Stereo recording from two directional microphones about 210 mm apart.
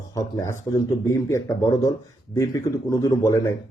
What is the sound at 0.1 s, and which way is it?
Speech, 15° left (ahead or behind).